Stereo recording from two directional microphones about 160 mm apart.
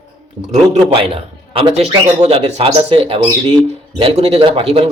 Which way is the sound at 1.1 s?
40° right (ahead or behind).